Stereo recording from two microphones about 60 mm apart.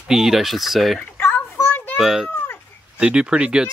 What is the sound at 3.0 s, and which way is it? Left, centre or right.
Speech, centre.